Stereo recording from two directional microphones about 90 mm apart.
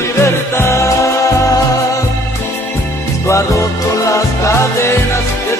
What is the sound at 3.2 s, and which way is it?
Music, 35° left (ahead or behind).